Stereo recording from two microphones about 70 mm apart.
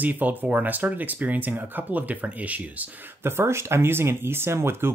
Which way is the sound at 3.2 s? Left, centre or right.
Right.